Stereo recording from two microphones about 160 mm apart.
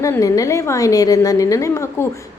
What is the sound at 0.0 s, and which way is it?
A woman's voice, 20° left (ahead or behind).